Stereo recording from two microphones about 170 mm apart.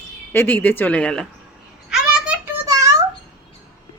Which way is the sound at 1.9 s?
5° right (ahead or behind).